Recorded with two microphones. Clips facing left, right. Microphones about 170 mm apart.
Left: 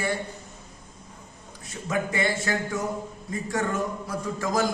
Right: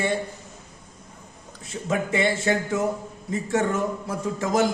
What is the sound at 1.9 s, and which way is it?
Speech, 25° right (ahead or behind).